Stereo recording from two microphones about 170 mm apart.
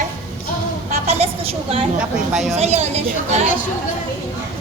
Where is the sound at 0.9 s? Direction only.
35° right (ahead or behind).